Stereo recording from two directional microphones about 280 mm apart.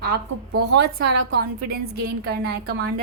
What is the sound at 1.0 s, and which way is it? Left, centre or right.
Speech, right.